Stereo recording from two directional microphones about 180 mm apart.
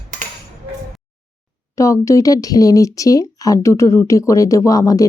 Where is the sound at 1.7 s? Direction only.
15° left (ahead or behind).